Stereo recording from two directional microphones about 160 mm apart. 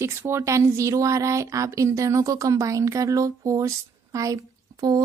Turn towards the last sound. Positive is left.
turn(degrees=-25)  # may be behind; listen again after turning